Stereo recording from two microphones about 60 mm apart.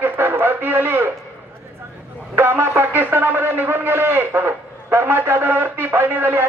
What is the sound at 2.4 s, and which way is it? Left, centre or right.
Speech, right.